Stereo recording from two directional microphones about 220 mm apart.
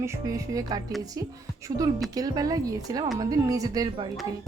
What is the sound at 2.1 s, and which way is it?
Speech, 15° right (ahead or behind).